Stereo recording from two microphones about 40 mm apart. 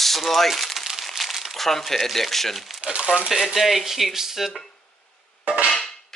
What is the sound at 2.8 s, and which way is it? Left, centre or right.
Speech, centre.